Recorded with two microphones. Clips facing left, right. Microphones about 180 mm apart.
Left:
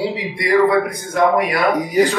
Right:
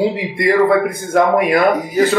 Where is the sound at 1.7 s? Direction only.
15° left (ahead or behind).